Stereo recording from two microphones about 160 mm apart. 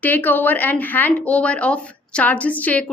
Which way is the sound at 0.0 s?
10° left (ahead or behind).